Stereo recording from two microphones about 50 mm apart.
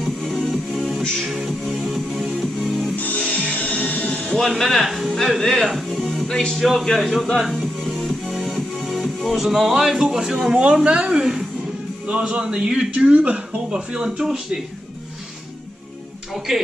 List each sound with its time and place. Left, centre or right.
0.0 s music: centre
3.3 s music: left
4.6 s speech: centre
5.4 s music: centre
6.2 s speech: centre
7.4 s music: centre
10.0 s speech: centre
13.7 s speech: centre